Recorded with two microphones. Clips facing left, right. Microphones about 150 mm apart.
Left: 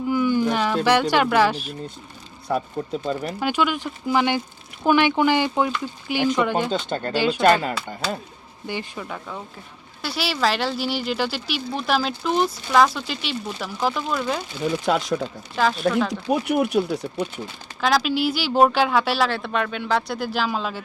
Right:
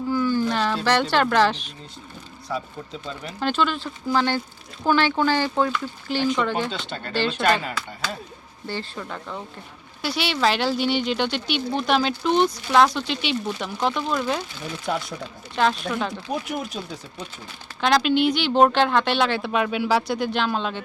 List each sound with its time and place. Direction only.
0.1 s a sound: 15° left (ahead or behind)
0.9 s speech: 10° left (ahead or behind)
2.5 s speech: 50° left (ahead or behind)
3.4 s speech: 10° left (ahead or behind)
6.7 s speech: 40° left (ahead or behind)
7.1 s speech: 10° left (ahead or behind)
7.4 s speech: 45° left (ahead or behind)
8.6 s speech: 15° left (ahead or behind)
14.8 s speech: 90° left
15.6 s speech: centre (ahead or behind)
16.3 s speech: 65° left (ahead or behind)
17.7 s speech: centre (ahead or behind)